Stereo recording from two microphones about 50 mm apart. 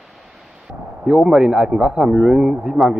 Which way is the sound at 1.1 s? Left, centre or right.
Centre.